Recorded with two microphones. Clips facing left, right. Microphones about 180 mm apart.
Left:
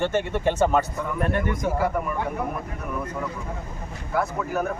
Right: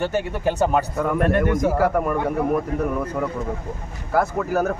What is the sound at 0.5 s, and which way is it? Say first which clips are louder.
A man's voice: right 1 dB; 55° right (ahead or behind).